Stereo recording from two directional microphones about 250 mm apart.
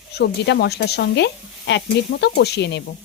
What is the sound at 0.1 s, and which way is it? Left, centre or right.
Speech, left.